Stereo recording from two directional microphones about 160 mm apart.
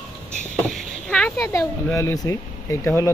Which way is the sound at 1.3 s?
20° left (ahead or behind).